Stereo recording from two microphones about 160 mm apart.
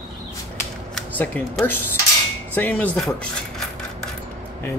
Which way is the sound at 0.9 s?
10° left (ahead or behind).